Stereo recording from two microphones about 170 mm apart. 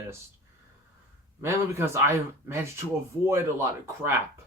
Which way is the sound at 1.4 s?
15° right (ahead or behind).